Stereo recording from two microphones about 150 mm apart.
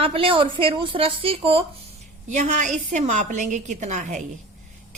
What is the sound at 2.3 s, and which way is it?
A woman's voice, 55° right (ahead or behind).